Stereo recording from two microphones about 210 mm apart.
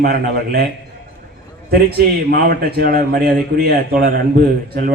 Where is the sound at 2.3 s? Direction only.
50° right (ahead or behind).